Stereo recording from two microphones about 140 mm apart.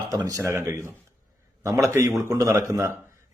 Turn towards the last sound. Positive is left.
turn(degrees=-20)  # may be behind; listen again after turning